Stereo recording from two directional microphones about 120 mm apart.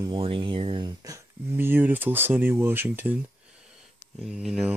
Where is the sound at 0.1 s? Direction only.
45° right (ahead or behind).